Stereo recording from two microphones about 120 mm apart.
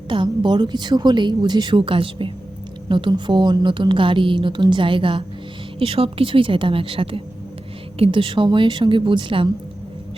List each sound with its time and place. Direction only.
0.1 s a woman's voice: 40° right (ahead or behind)